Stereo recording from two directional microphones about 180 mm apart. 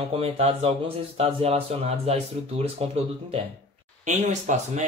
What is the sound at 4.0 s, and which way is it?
Speech, 40° right (ahead or behind).